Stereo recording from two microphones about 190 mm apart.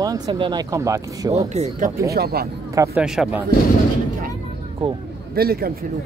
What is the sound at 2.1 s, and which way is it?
Speech, 55° right (ahead or behind).